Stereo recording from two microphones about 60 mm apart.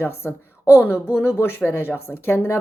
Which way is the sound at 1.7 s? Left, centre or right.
Left.